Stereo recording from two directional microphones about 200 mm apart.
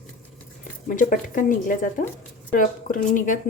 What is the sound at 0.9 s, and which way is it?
A woman's voice, 40° left (ahead or behind).